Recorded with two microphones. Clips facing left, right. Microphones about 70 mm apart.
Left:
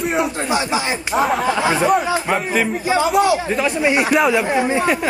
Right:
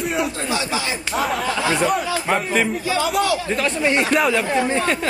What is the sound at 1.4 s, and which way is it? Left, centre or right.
Speech, left.